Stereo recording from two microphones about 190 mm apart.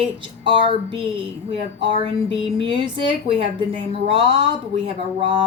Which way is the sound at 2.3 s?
30° right (ahead or behind).